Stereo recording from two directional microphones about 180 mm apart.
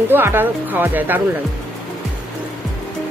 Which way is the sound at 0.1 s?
10° right (ahead or behind).